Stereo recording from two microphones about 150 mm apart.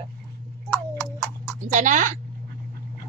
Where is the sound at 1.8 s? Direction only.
60° right (ahead or behind).